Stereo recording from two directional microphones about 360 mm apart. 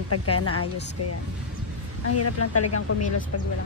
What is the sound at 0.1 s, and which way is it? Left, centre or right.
Speech, left.